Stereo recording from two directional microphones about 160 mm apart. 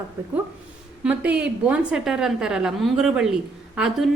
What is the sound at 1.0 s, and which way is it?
A woman's voice, 10° right (ahead or behind).